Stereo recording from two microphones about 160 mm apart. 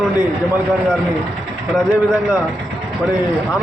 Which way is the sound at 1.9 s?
5° right (ahead or behind).